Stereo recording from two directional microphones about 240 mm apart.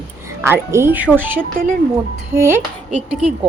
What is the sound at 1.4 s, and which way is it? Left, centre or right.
Speech, right.